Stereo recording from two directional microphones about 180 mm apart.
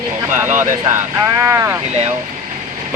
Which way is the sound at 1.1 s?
15° right (ahead or behind).